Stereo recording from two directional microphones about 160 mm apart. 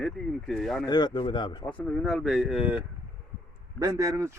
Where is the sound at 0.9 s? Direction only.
30° left (ahead or behind).